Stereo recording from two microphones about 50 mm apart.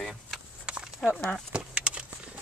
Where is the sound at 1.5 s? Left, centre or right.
Right.